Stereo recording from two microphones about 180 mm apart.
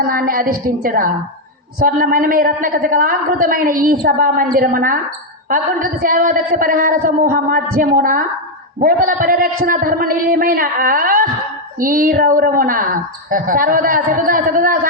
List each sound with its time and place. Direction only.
0.0 s a woman's voice: 55° right (ahead or behind)